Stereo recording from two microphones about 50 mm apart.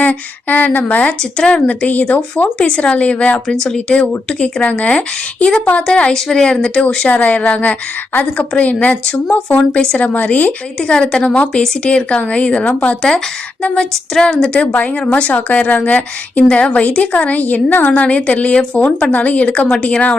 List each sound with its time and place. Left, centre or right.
0.0 s a woman's voice: left
2.6 s a woman's voice: left
3.5 s speech: centre
4.6 s a woman's voice: left
7.1 s a woman's voice: left
10.8 s a woman's voice: centre
13.0 s speech: centre
13.6 s a woman's voice: left
14.6 s a woman's voice: left
17.8 s a woman's voice: left